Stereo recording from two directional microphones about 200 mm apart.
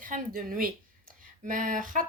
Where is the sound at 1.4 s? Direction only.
40° right (ahead or behind).